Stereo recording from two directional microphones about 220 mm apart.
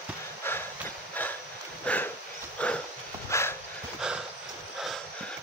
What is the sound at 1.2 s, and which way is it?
Dog, 10° left (ahead or behind).